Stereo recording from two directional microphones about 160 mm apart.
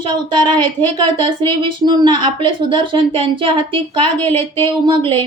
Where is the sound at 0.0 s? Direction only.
30° right (ahead or behind).